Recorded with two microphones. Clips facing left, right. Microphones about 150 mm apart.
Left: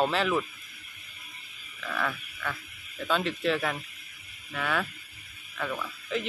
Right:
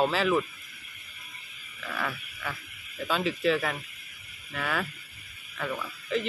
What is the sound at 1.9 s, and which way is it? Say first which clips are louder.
Speech: left 2 dB; 5° right (ahead or behind).